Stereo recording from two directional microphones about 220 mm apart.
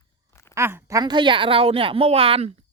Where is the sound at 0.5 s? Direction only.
10° right (ahead or behind).